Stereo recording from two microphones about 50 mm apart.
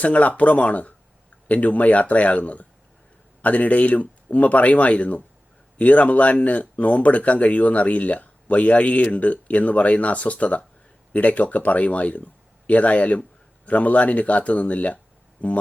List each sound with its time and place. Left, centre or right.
0.0 s speech: left